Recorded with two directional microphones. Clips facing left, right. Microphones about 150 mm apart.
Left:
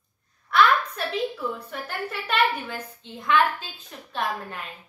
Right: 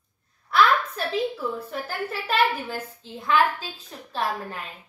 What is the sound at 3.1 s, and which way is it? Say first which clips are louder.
Speech: even; 35° right (ahead or behind).